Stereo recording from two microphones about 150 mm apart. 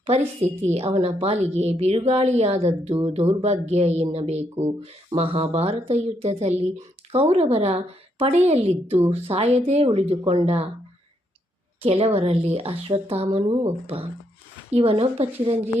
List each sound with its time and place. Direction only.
0.6 s a woman's voice: 45° right (ahead or behind)
11.8 s speech: 40° right (ahead or behind)